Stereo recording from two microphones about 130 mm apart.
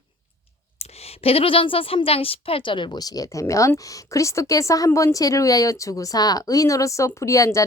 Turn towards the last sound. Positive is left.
turn(degrees=25)  # may be behind; listen again after turning